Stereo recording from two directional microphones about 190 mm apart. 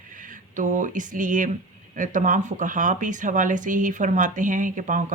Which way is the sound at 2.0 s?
45° right (ahead or behind).